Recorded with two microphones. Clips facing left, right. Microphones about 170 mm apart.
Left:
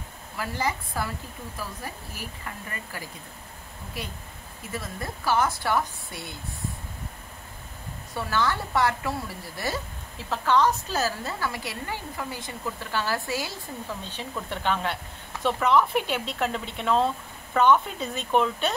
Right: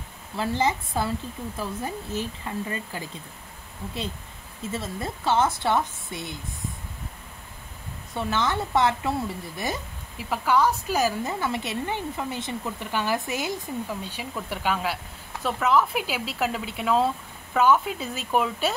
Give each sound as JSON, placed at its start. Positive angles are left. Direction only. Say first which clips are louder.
{"t": 0.4, "sound": "a woman's voice", "louder": "right 5 dB", "side_deg": -25}
{"t": 4.6, "sound": "a woman's voice", "louder": "right 4 dB", "side_deg": -25}
{"t": 8.1, "sound": "a woman's voice", "louder": "right 1 dB", "side_deg": -20}